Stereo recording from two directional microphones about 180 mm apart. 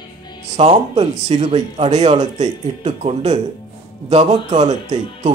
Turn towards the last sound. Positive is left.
turn(degrees=-40)  # may be behind; listen again after turning